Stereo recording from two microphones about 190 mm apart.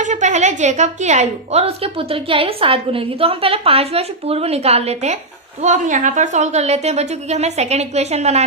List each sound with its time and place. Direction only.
0.0 s a woman's voice: 40° right (ahead or behind)